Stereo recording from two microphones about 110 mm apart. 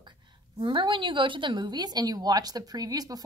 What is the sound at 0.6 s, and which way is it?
A woman's voice, 50° right (ahead or behind).